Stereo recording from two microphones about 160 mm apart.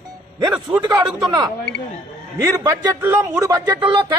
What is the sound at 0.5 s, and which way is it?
Speech, 10° right (ahead or behind).